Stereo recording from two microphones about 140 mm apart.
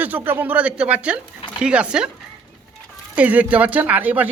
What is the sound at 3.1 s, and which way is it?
Speech, 10° right (ahead or behind).